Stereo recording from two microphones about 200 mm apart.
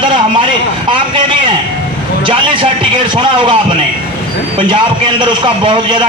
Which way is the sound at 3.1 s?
25° right (ahead or behind).